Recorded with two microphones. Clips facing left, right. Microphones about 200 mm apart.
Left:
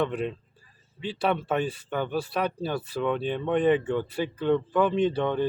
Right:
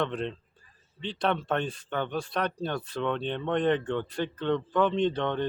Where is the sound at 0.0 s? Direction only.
10° left (ahead or behind).